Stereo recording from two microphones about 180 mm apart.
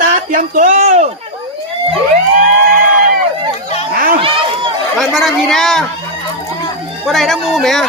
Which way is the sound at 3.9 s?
55° right (ahead or behind).